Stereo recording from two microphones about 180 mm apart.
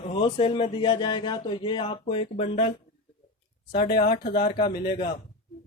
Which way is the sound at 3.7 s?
60° left (ahead or behind).